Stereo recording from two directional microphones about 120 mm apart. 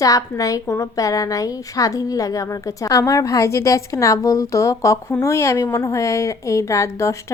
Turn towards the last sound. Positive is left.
turn(degrees=25)  # may be behind; listen again after turning